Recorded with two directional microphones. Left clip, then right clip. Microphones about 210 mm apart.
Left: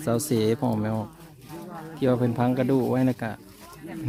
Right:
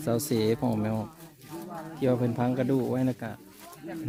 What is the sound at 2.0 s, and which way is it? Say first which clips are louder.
Speech: left 3 dB; 10° left (ahead or behind).